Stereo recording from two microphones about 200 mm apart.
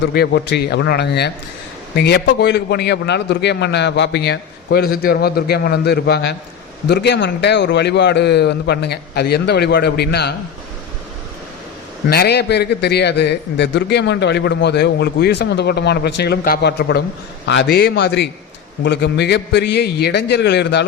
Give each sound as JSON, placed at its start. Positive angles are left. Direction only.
{"t": 0.0, "sound": "a man's voice", "side_deg": 55}
{"t": 12.0, "sound": "a man's voice", "side_deg": 50}